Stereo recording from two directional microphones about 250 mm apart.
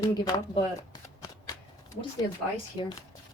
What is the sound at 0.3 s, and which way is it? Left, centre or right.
Shuffling cards, centre.